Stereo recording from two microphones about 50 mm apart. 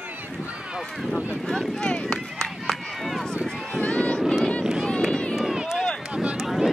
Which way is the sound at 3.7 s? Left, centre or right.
Left.